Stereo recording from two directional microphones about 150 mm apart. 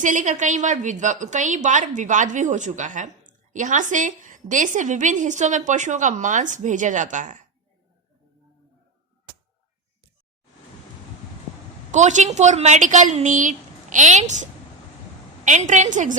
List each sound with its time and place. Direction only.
0.0 s a woman's voice: 55° right (ahead or behind)
11.9 s a woman's voice: 50° right (ahead or behind)
15.4 s a woman's voice: 55° right (ahead or behind)